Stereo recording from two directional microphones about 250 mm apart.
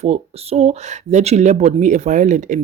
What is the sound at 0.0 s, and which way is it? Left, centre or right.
A woman's voice, right.